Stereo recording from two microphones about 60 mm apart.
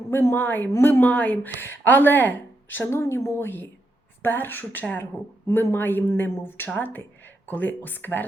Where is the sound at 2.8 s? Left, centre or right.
Left.